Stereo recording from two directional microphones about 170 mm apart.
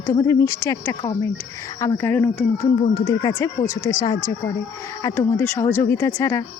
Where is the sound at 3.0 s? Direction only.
25° left (ahead or behind).